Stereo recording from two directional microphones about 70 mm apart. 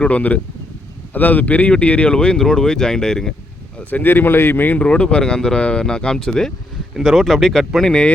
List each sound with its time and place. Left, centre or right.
0.0 s speech: left
3.9 s speech: left
4.8 s speech: centre